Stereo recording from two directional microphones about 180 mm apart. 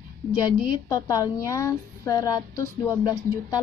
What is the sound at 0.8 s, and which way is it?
Speech, 20° left (ahead or behind).